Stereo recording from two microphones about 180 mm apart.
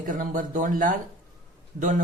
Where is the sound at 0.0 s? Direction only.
45° right (ahead or behind).